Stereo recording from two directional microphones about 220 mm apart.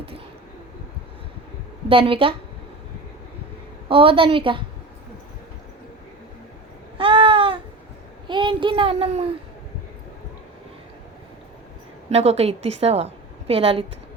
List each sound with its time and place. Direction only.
1.9 s a woman's voice: 25° right (ahead or behind)
3.8 s a woman's voice: 25° right (ahead or behind)
7.0 s babbling: 25° right (ahead or behind)
8.3 s a child's voice: 20° right (ahead or behind)
12.1 s a woman's voice: 30° right (ahead or behind)